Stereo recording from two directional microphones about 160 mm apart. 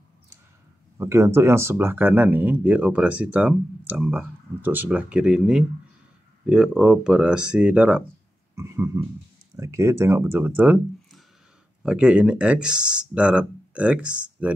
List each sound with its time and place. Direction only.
0.9 s speech: 15° right (ahead or behind)
8.5 s burping: 20° right (ahead or behind)
9.6 s speech: 15° right (ahead or behind)